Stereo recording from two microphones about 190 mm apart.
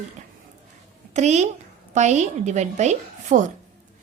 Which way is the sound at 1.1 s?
35° right (ahead or behind).